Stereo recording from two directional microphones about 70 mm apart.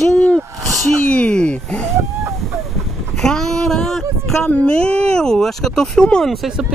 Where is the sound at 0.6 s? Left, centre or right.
Right.